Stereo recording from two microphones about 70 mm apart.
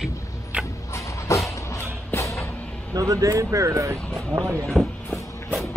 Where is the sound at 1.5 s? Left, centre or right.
Left.